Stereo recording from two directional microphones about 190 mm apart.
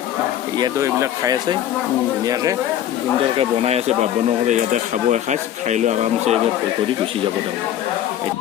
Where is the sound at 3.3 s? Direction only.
30° right (ahead or behind).